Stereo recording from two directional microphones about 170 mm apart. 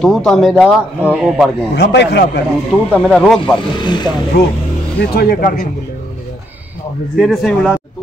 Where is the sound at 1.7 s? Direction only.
85° left.